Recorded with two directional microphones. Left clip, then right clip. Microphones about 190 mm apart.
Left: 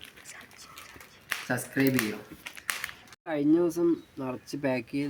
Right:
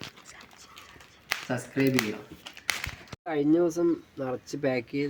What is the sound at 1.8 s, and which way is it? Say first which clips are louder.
Speech: right 2 dB; 25° right (ahead or behind).